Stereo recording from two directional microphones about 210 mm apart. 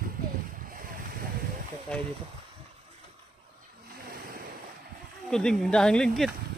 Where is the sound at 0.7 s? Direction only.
45° right (ahead or behind).